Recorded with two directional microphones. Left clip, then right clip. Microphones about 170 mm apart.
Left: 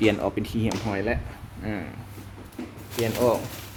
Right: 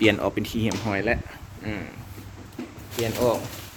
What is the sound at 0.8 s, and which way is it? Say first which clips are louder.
Speech: right 4 dB; 15° right (ahead or behind).